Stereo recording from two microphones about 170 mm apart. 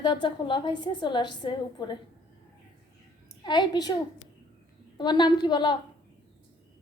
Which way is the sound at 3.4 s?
25° left (ahead or behind).